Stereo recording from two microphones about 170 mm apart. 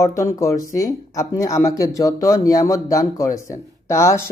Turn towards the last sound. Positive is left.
turn(degrees=15)  # may be behind; listen again after turning